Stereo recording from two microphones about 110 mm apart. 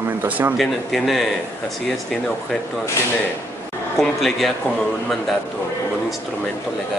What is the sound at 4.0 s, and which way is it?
Speech, centre (ahead or behind).